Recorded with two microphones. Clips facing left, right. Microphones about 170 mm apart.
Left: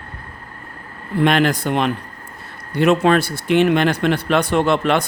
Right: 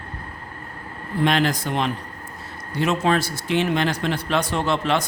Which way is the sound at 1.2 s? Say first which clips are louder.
Left 4 dB; 60° left (ahead or behind).